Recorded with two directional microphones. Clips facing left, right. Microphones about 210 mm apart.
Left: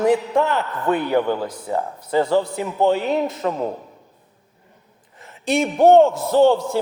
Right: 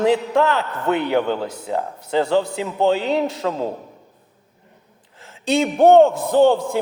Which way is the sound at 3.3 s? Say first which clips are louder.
Even; 90° right.